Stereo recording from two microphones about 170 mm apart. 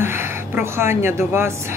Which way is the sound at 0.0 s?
15° right (ahead or behind).